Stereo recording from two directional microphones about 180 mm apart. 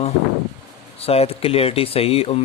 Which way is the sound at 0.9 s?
35° left (ahead or behind).